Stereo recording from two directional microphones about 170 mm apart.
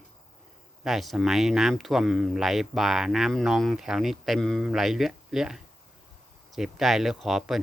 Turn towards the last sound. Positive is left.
turn(degrees=0)  # may be behind; listen again after turning